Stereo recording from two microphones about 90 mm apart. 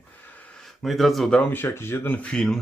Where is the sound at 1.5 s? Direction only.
25° left (ahead or behind).